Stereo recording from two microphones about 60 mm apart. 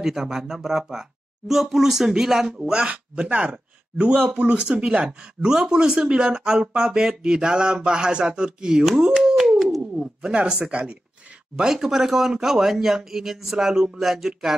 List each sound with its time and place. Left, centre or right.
0.0 s speech: centre
2.6 s speech: centre
9.2 s a sound: centre
9.9 s speech: centre